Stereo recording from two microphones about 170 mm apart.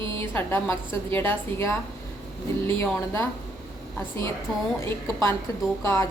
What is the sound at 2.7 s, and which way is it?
Speech, 15° left (ahead or behind).